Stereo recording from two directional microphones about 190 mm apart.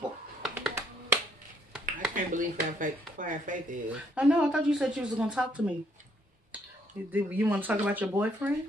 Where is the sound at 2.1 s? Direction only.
45° right (ahead or behind).